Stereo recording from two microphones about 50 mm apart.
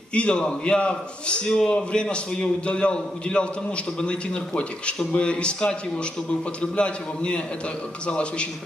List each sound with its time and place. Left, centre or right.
0.1 s a man's voice: left
6.8 s a man's voice: left